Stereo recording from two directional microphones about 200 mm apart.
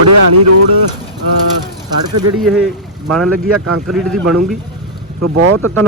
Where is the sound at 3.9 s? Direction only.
Centre (ahead or behind).